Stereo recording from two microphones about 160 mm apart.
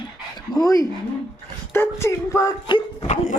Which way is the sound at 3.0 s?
45° left (ahead or behind).